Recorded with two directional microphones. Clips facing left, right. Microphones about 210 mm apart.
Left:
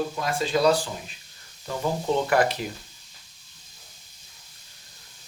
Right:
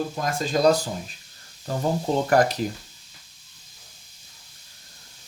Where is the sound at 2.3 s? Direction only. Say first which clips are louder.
Right 3 dB; 40° right (ahead or behind).